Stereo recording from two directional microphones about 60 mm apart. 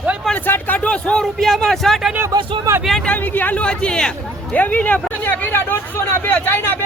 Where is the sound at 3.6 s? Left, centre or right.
Centre.